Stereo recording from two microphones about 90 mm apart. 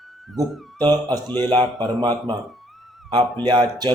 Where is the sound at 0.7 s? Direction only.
50° right (ahead or behind).